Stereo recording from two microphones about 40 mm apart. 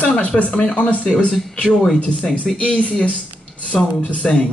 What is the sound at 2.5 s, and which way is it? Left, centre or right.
Speech, left.